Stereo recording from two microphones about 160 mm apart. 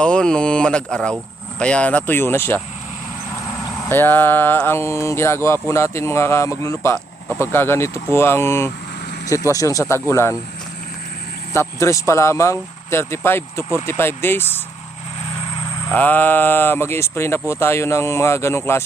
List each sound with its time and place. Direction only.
0.0 s speech: 5° left (ahead or behind)
3.8 s speech: 15° left (ahead or behind)
11.5 s speech: 15° left (ahead or behind)
15.9 s speech: 10° left (ahead or behind)